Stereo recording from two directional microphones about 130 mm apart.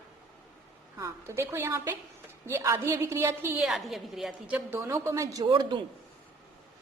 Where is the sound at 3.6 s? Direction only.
Centre (ahead or behind).